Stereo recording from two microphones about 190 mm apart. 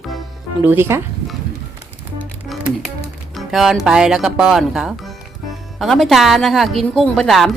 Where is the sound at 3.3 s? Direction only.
Centre (ahead or behind).